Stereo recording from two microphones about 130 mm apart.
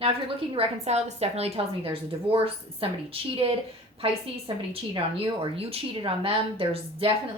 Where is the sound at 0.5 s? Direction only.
55° right (ahead or behind).